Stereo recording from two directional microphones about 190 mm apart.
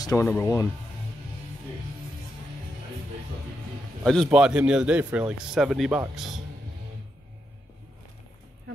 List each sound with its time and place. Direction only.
0.0 s speech: 15° left (ahead or behind)
4.0 s a man's voice: 5° left (ahead or behind)